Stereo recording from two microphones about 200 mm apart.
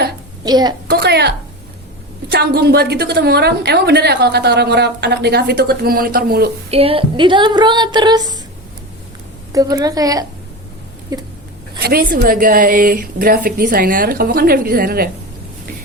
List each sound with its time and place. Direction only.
0.4 s speech: 20° right (ahead or behind)
0.9 s speech: 55° right (ahead or behind)
2.3 s a woman's voice: 55° right (ahead or behind)
6.7 s speech: 30° right (ahead or behind)
9.5 s a woman's voice: 15° right (ahead or behind)
11.8 s a woman's voice: 50° right (ahead or behind)